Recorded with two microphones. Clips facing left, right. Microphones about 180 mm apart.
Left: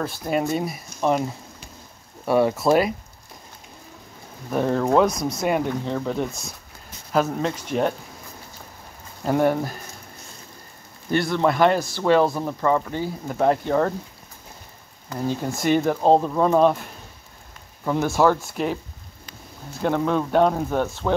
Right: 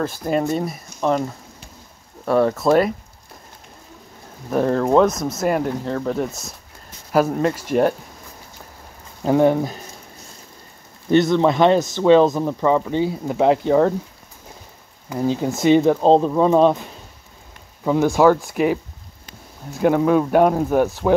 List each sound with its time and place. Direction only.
0.0 s speech: centre (ahead or behind)
4.5 s speech: centre (ahead or behind)
9.2 s speech: 15° right (ahead or behind)
11.1 s speech: 20° right (ahead or behind)
15.0 s speech: 15° right (ahead or behind)
17.8 s speech: 15° right (ahead or behind)